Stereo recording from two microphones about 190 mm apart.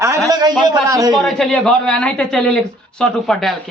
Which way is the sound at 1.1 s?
Centre (ahead or behind).